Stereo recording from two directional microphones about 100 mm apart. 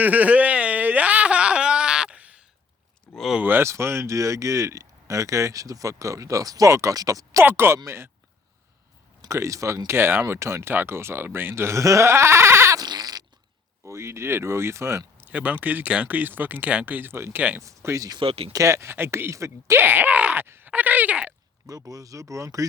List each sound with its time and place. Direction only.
0.0 s a sound: 15° right (ahead or behind)
3.1 s a sound: centre (ahead or behind)
3.4 s speech: 25° right (ahead or behind)
7.4 s speech: 25° right (ahead or behind)
9.2 s speech: 30° right (ahead or behind)
12.8 s fart: 45° right (ahead or behind)
13.8 s speech: 30° right (ahead or behind)
15.3 s speech: 15° right (ahead or behind); by 18.2 s 35° right (ahead or behind)
18.2 s speech: 75° right (ahead or behind)
18.5 s speech: 30° right (ahead or behind); by 21.3 s 15° right (ahead or behind)
21.7 s speech: 35° right (ahead or behind)